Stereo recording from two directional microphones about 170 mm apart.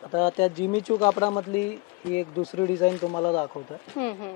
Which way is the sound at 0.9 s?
30° left (ahead or behind).